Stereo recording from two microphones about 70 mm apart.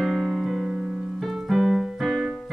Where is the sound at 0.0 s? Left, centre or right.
Centre.